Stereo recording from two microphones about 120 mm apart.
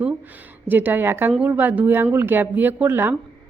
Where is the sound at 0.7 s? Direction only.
15° right (ahead or behind).